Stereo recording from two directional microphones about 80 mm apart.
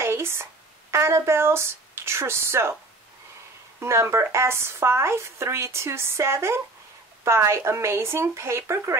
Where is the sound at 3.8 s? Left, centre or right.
Right.